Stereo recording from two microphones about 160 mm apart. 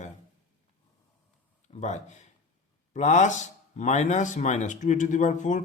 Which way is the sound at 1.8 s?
45° left (ahead or behind).